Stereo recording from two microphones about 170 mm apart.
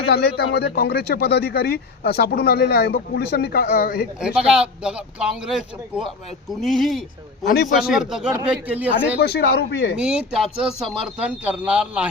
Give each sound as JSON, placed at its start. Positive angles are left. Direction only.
{"t": 0.1, "sound": "speech", "side_deg": 70}
{"t": 4.2, "sound": "speech", "side_deg": -5}
{"t": 7.4, "sound": "a man's voice", "side_deg": 60}
{"t": 7.7, "sound": "speech", "side_deg": -5}
{"t": 9.2, "sound": "speech", "side_deg": 70}
{"t": 10.0, "sound": "speech", "side_deg": -5}